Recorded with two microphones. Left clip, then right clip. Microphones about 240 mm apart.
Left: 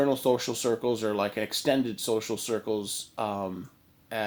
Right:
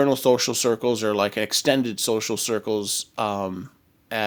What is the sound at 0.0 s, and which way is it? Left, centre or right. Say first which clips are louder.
Speech: right 6 dB; right.